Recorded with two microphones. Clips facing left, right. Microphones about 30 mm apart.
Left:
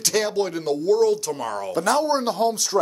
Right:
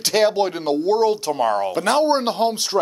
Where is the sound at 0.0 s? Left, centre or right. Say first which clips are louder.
Right 5 dB; right.